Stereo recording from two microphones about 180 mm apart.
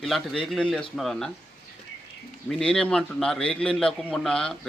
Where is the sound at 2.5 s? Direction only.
5° left (ahead or behind).